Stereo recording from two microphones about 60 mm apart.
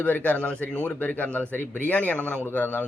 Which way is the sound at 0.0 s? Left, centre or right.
Left.